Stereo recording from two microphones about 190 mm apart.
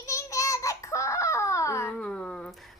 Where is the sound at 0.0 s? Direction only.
15° left (ahead or behind).